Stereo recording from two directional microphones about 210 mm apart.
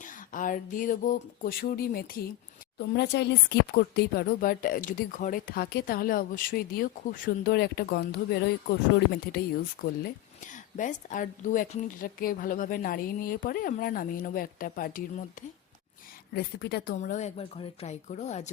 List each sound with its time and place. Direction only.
0.0 s a sound: 40° left (ahead or behind)
2.7 s speech: 55° left (ahead or behind)
9.8 s a woman's voice: 40° left (ahead or behind)